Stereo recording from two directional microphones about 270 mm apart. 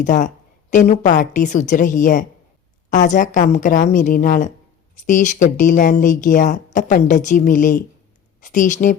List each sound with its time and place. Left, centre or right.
0.0 s a woman's voice: left